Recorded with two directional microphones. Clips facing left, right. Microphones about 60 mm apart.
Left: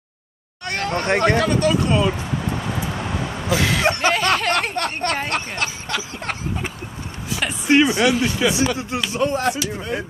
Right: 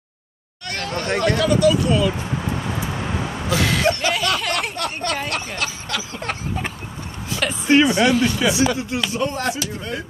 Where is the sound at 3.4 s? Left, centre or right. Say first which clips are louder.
Left 1 dB; centre.